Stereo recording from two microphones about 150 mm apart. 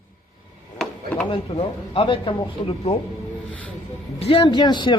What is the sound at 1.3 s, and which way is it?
Speech, 40° left (ahead or behind).